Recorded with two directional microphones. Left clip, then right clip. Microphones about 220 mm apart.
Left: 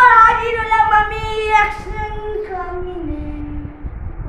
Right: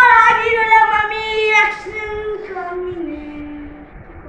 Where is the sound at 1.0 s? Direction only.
20° left (ahead or behind).